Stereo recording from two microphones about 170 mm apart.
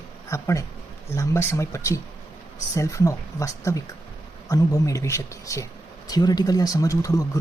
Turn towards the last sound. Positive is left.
turn(degrees=20)  # may be behind; listen again after turning